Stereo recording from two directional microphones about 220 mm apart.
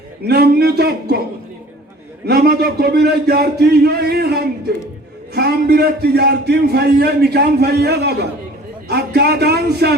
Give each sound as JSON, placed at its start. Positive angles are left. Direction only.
{"t": 0.3, "sound": "a man's voice", "side_deg": -45}
{"t": 2.2, "sound": "a man's voice", "side_deg": -45}